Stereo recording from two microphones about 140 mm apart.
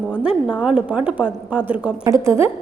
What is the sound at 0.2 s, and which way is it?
A woman's voice, 5° right (ahead or behind).